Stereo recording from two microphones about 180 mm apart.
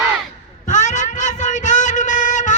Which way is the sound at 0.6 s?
45° left (ahead or behind).